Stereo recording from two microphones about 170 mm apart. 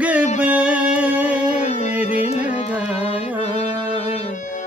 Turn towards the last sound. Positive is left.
turn(degrees=35)  # may be behind; listen again after turning